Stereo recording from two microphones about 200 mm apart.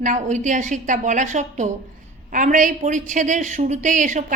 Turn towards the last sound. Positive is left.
turn(degrees=-40)  # may be behind; listen again after turning